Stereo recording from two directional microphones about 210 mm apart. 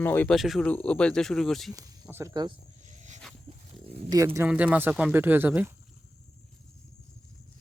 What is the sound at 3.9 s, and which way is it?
Speech, 20° right (ahead or behind).